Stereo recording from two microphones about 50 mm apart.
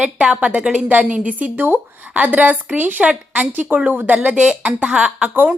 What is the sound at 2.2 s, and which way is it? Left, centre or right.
Speech, right.